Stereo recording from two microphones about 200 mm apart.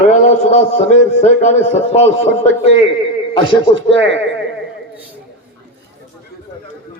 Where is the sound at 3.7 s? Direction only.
65° right (ahead or behind).